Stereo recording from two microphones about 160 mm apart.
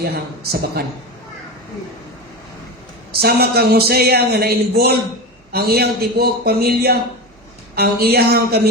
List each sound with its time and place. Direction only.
0.0 s a man's voice: 75° right (ahead or behind)
3.1 s a man's voice: 75° right (ahead or behind)